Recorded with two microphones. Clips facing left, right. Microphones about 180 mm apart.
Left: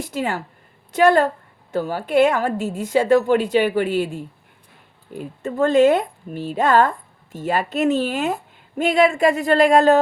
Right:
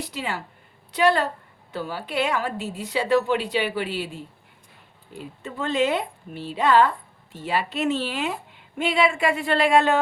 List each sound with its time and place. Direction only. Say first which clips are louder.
0.0 s a woman's voice: left 6 dB; 50° left (ahead or behind)